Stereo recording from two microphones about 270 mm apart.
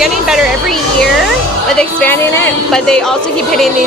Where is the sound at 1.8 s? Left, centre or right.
Centre.